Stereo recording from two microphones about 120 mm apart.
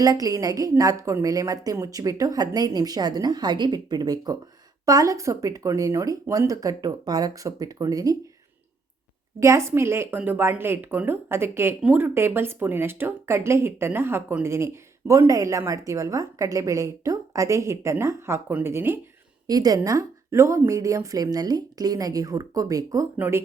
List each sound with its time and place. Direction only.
0.0 s a woman's voice: 30° right (ahead or behind)
9.4 s speech: 25° right (ahead or behind)
19.5 s a woman's voice: 30° right (ahead or behind)
23.1 s speech: 15° right (ahead or behind)